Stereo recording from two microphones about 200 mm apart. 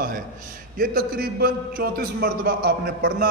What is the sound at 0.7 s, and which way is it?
A man's voice, 45° right (ahead or behind).